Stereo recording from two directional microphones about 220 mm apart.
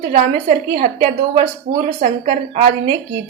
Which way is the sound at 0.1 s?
35° right (ahead or behind).